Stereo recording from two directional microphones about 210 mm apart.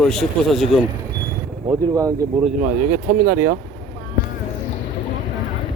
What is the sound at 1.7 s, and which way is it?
Speech, 15° right (ahead or behind).